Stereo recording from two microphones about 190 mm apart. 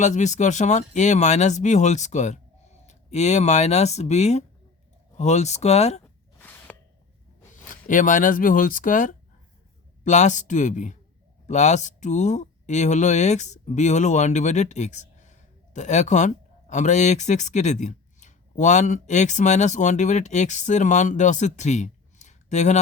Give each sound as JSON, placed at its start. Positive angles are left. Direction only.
{"t": 0.0, "sound": "speech", "side_deg": 40}
{"t": 6.4, "sound": "a sound", "side_deg": 10}
{"t": 7.5, "sound": "speech", "side_deg": 45}